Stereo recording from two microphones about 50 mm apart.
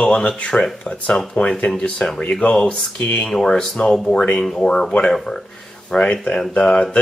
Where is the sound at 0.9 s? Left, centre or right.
Left.